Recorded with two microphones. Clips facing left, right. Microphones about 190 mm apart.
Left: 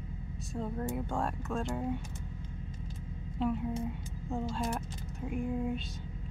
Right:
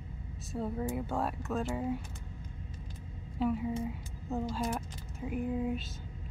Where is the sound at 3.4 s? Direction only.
5° right (ahead or behind).